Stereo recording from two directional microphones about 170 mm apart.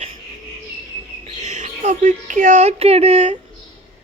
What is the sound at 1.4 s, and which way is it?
Speech, 45° right (ahead or behind).